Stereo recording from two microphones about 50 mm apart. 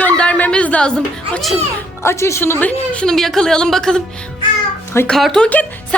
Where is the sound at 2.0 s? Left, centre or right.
Left.